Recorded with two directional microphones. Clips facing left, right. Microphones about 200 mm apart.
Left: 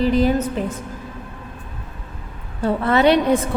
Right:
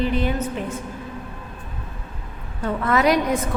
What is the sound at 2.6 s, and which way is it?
Speech, 30° left (ahead or behind).